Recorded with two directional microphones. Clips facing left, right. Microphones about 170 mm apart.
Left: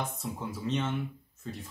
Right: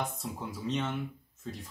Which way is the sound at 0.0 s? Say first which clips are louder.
Left 1 dB; centre (ahead or behind).